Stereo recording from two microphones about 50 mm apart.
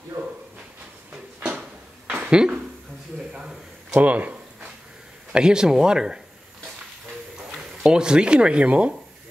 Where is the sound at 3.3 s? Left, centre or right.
Centre.